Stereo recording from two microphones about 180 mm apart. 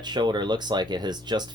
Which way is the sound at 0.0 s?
25° right (ahead or behind).